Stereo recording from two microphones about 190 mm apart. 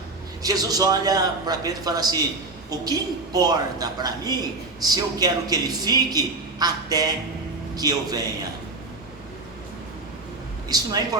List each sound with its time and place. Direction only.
0.4 s a man's voice: 20° right (ahead or behind)
10.7 s a man's voice: 20° right (ahead or behind)